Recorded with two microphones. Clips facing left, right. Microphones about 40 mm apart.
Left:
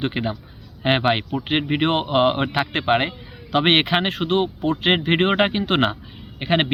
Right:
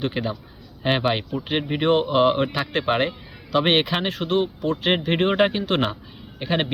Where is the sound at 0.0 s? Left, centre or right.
Left.